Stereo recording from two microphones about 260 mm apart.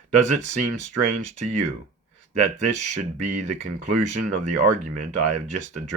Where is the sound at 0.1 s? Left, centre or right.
Right.